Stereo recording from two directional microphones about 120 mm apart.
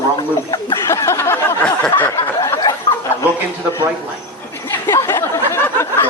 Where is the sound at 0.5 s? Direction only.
30° left (ahead or behind).